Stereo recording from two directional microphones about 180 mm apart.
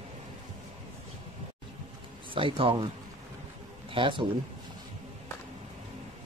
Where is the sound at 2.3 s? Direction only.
30° right (ahead or behind).